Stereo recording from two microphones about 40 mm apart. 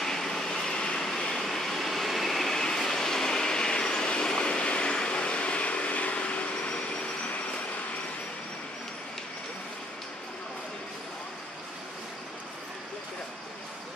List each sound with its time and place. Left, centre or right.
0.0 s vehicle: centre
1.4 s train: centre
2.6 s vehicle: centre; by 6.7 s left